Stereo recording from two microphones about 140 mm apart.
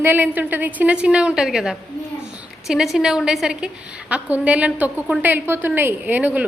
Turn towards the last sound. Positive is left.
turn(degrees=-10)  # may be behind; listen again after turning